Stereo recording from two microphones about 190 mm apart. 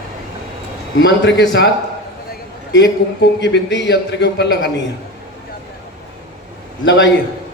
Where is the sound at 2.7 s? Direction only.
65° left (ahead or behind).